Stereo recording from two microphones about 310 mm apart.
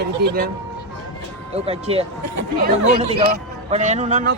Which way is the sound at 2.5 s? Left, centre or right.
Right.